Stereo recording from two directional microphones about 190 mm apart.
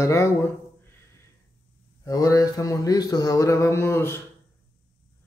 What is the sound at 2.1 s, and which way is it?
Speech, 15° left (ahead or behind).